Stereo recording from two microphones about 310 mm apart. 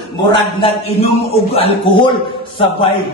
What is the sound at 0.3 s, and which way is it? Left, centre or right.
A man's voice, centre.